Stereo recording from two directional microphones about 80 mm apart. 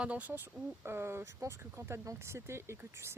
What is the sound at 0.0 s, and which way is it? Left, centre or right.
Speech, centre.